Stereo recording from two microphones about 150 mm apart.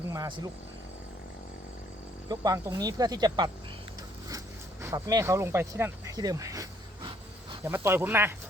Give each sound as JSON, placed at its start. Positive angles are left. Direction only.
{"t": 0.1, "sound": "a sound", "side_deg": -25}
{"t": 2.3, "sound": "speech", "side_deg": -25}
{"t": 4.8, "sound": "speech", "side_deg": -20}
{"t": 7.7, "sound": "speech", "side_deg": -15}